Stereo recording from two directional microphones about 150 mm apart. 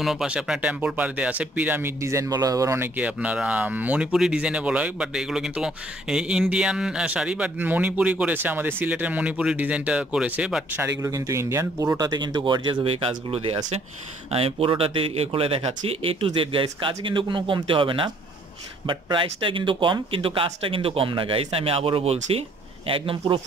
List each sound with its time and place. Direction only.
0.0 s speech: 5° right (ahead or behind)
11.0 s a man's voice: 20° right (ahead or behind); by 23.1 s 35° right (ahead or behind)